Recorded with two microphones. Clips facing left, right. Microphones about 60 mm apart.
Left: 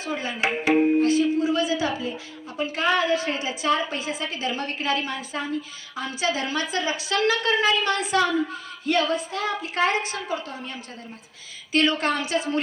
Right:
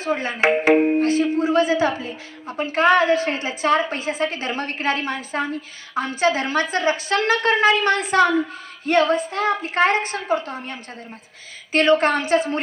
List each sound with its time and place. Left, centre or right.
0.0 s a woman's voice: right